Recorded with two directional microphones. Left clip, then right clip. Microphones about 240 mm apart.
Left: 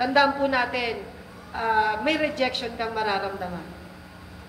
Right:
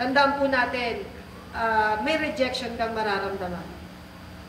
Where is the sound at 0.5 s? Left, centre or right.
Left.